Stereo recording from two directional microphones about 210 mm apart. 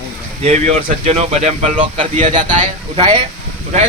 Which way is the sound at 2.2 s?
35° right (ahead or behind).